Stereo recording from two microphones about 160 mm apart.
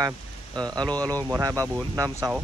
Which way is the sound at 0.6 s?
25° right (ahead or behind).